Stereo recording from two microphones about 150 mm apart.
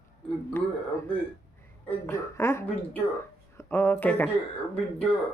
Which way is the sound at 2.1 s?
15° left (ahead or behind).